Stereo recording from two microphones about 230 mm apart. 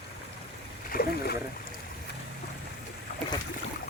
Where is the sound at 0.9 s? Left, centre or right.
Left.